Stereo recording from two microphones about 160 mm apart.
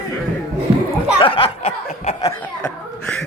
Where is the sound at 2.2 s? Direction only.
20° left (ahead or behind).